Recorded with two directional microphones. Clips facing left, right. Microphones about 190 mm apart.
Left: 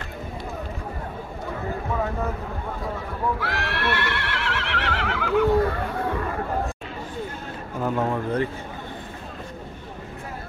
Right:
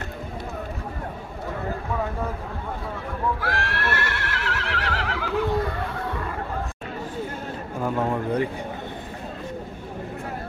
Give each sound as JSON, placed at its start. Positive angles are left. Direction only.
{"t": 3.3, "sound": "neigh", "side_deg": -45}
{"t": 7.8, "sound": "speech", "side_deg": -5}